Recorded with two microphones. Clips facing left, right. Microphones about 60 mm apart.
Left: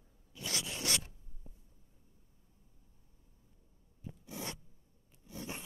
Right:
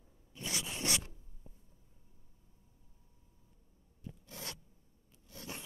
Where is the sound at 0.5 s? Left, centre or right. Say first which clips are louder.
Even; centre.